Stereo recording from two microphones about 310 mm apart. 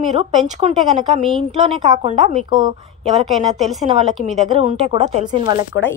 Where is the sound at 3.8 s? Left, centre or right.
Right.